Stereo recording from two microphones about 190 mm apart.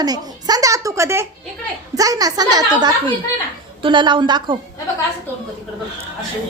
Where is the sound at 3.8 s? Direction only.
25° right (ahead or behind).